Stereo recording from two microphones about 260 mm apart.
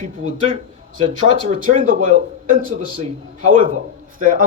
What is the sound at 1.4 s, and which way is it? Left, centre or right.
Speech, right.